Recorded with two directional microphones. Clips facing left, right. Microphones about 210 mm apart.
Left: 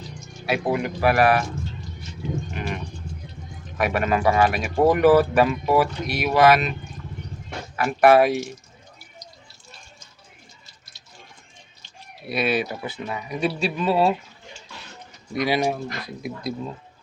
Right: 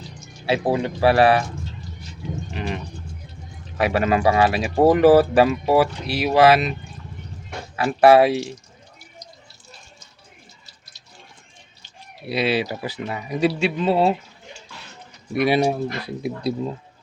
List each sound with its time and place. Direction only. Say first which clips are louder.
0.4 s speech: right 3 dB; 30° right (ahead or behind)
2.5 s a sound: right 2 dB; 30° right (ahead or behind)
3.8 s speech: right 3 dB; 30° right (ahead or behind)
7.8 s speech: right 2 dB; 30° right (ahead or behind)
12.3 s speech: right 2 dB; 30° right (ahead or behind)
15.4 s speech: right 4 dB; 30° right (ahead or behind)